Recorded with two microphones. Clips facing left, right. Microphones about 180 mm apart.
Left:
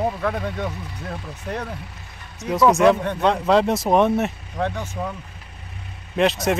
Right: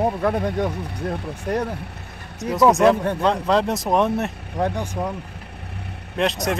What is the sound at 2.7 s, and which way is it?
Speech, centre (ahead or behind).